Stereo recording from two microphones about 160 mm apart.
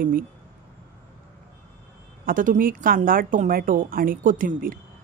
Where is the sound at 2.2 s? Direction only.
60° right (ahead or behind).